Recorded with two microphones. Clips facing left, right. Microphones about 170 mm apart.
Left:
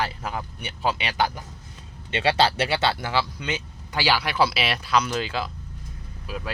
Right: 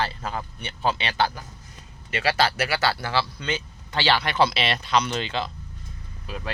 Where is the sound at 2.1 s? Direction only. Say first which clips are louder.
Left 2 dB; 25° left (ahead or behind); by 5.5 s 5° left (ahead or behind).